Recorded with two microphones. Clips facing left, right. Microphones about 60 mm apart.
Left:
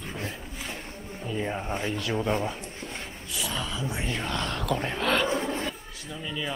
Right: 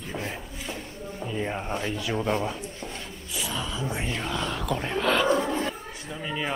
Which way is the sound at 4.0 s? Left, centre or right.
Centre.